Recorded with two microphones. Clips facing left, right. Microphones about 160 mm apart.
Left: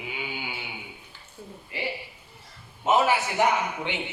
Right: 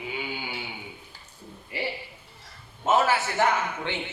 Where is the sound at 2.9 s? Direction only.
15° left (ahead or behind).